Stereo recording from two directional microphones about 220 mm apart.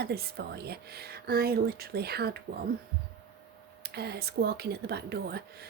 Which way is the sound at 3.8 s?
45° right (ahead or behind).